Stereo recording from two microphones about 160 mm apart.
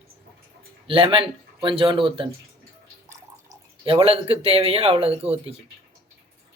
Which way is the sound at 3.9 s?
35° right (ahead or behind).